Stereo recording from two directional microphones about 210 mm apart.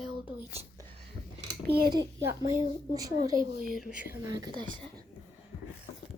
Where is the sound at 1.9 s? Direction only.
15° right (ahead or behind).